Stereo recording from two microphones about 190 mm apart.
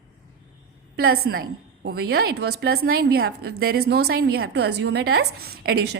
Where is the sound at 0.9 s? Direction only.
55° right (ahead or behind).